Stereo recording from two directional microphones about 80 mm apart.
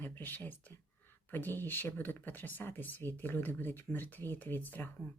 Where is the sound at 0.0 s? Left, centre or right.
Left.